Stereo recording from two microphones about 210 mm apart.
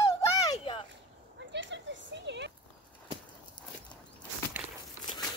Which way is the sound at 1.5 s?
55° right (ahead or behind).